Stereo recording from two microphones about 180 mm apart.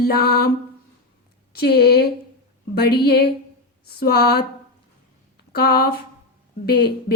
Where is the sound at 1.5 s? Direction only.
60° left (ahead or behind).